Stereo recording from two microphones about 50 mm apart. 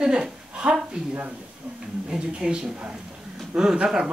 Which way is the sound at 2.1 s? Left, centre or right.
Centre.